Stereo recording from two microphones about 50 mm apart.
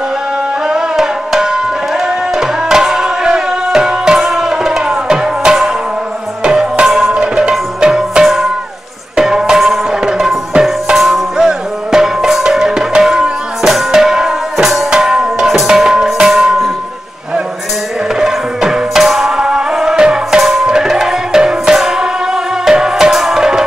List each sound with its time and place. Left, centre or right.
0.7 s tabla: centre
6.4 s music: centre
18.2 s music: centre